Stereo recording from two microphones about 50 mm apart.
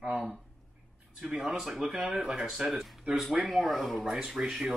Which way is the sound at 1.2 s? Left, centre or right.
Centre.